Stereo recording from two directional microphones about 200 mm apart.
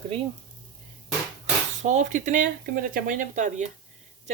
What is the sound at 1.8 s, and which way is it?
A woman's voice, 35° right (ahead or behind).